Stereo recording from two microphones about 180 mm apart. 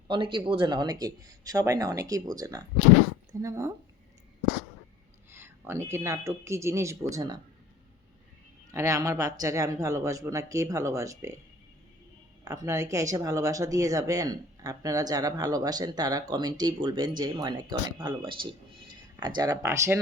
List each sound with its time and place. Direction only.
0.1 s speech: 25° right (ahead or behind)
5.3 s speech: 15° right (ahead or behind)
8.7 s speech: 15° right (ahead or behind)
12.5 s speech: 15° right (ahead or behind)